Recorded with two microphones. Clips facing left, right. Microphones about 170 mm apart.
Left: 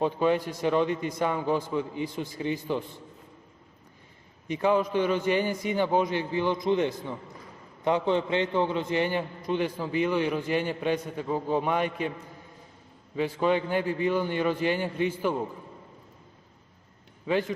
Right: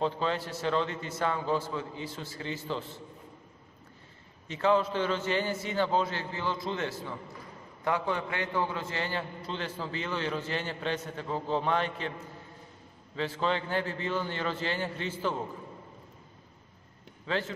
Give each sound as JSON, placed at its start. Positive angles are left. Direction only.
{"t": 0.0, "sound": "a man's voice", "side_deg": 15}
{"t": 4.5, "sound": "a man's voice", "side_deg": 15}
{"t": 13.1, "sound": "a man's voice", "side_deg": 15}
{"t": 17.3, "sound": "a man's voice", "side_deg": 15}